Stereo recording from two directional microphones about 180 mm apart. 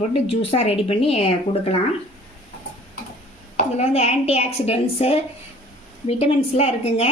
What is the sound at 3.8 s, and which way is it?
A woman's voice, 35° left (ahead or behind).